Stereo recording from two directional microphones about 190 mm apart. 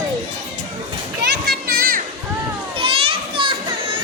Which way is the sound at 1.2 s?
50° right (ahead or behind).